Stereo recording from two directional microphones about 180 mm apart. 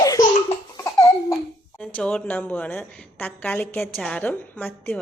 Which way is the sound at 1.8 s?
10° left (ahead or behind).